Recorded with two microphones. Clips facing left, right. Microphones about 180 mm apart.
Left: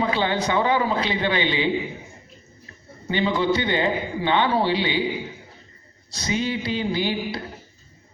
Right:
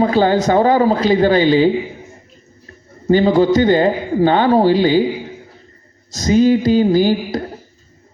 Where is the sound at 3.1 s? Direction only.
40° right (ahead or behind).